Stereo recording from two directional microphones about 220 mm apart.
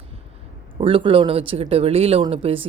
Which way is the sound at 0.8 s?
25° right (ahead or behind).